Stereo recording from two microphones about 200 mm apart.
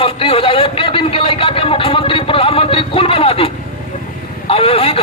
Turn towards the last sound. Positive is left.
turn(degrees=30)  # may be behind; listen again after turning